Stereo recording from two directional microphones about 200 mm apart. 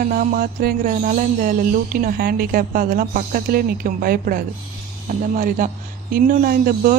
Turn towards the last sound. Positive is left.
turn(degrees=-45)  # may be behind; listen again after turning